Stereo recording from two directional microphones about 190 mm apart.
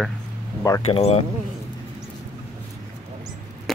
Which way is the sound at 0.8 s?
35° left (ahead or behind).